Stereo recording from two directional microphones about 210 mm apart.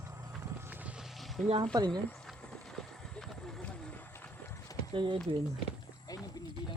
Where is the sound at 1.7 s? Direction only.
20° right (ahead or behind).